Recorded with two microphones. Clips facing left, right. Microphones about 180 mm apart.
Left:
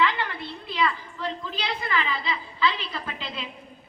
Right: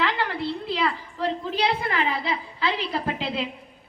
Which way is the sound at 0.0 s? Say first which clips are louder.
Right 1 dB; 70° right (ahead or behind).